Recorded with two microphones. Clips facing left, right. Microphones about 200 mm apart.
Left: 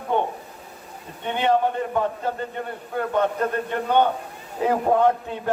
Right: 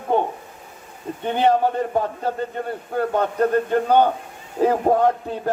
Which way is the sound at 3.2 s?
40° right (ahead or behind).